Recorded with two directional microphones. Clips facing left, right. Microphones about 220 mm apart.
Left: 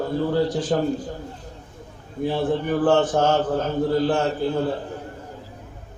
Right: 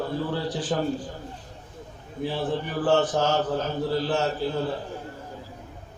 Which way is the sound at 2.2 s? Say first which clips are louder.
Left 5 dB; 45° left (ahead or behind).